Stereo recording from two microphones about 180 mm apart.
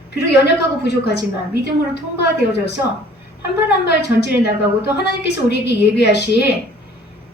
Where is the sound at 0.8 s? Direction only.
70° left (ahead or behind).